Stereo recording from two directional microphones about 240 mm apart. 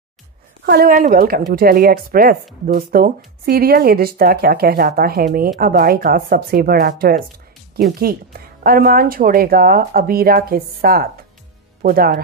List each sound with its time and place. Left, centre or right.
0.7 s speech: right